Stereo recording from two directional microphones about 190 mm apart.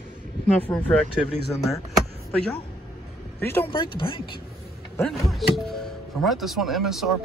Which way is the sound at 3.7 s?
25° left (ahead or behind).